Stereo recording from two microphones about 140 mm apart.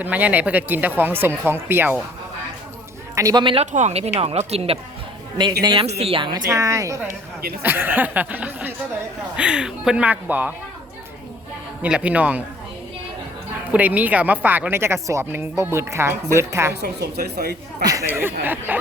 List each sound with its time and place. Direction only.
0.0 s speech: 10° right (ahead or behind)
3.2 s a man's voice: 25° right (ahead or behind)
3.4 s speech: 40° right (ahead or behind)
3.7 s speech: 55° right (ahead or behind); by 6.4 s 35° right (ahead or behind)
6.5 s speech: 20° right (ahead or behind)
11.8 s speech: 10° right (ahead or behind)
13.7 s speech: 10° right (ahead or behind)
17.3 s speech: 90° right
18.0 s speech: 15° right (ahead or behind)